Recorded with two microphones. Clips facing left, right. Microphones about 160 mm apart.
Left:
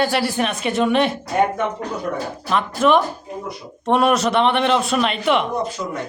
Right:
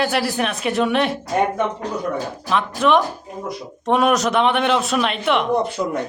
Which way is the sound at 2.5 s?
Centre (ahead or behind).